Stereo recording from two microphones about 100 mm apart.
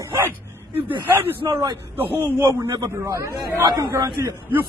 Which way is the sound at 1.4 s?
50° right (ahead or behind).